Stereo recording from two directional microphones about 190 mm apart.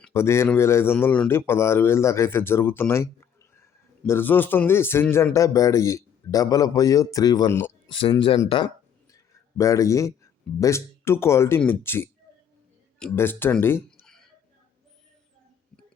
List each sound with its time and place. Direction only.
0.0 s speech: 15° left (ahead or behind)
7.9 s speech: 25° left (ahead or behind); by 14.3 s 5° left (ahead or behind)